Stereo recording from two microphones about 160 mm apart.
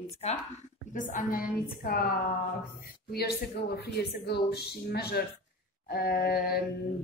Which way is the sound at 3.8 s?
85° left.